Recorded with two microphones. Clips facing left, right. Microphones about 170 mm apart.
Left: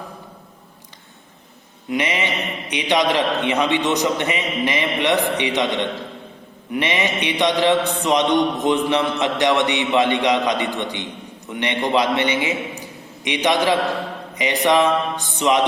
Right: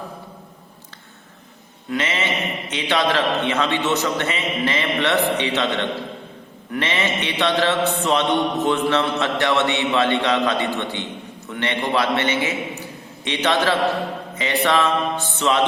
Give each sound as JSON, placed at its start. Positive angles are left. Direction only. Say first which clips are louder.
{"t": 1.9, "sound": "mantra", "louder": "left 1 dB", "side_deg": 15}